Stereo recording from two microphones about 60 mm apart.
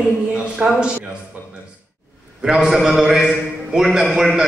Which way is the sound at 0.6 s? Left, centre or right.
Centre.